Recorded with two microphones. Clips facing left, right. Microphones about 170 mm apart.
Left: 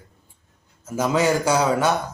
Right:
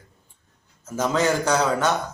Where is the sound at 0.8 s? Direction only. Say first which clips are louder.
Left 2 dB; 10° left (ahead or behind).